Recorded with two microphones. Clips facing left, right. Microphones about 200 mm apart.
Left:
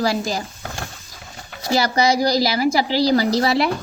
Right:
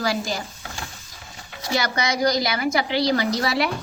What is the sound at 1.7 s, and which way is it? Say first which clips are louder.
A woman's voice: left 6 dB; 30° left (ahead or behind).